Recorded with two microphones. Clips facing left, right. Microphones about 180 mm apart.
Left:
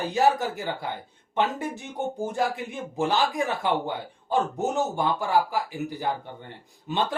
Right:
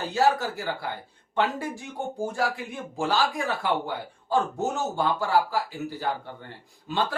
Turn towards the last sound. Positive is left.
turn(degrees=20)  # may be behind; listen again after turning